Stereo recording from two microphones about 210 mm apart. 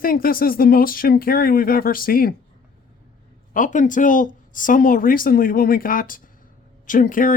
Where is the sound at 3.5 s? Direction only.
40° left (ahead or behind).